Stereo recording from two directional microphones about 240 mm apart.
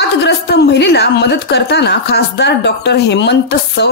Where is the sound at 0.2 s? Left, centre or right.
Left.